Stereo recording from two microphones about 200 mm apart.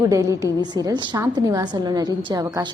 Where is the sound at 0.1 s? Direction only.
15° right (ahead or behind).